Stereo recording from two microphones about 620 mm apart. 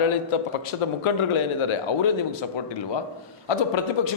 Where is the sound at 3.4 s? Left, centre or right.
Left.